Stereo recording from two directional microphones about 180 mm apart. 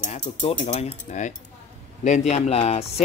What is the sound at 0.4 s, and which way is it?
Speech, 35° left (ahead or behind).